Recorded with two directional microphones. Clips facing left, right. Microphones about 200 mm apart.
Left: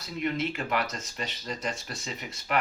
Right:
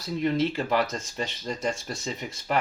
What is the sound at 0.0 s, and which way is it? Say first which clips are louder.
Speech: right 5 dB; 30° right (ahead or behind).